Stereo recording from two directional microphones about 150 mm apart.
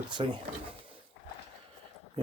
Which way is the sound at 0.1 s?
35° right (ahead or behind).